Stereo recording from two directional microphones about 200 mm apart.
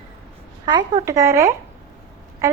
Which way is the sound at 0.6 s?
20° right (ahead or behind).